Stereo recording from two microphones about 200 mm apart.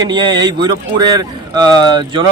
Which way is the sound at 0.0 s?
20° right (ahead or behind).